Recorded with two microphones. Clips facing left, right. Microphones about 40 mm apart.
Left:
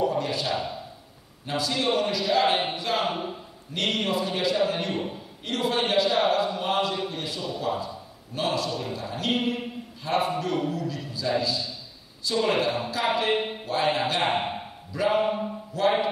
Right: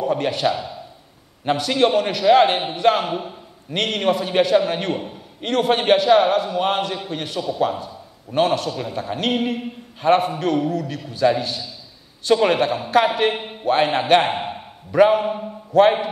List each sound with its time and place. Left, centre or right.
0.1 s a man's voice: right
14.3 s a sound: centre
14.9 s a man's voice: right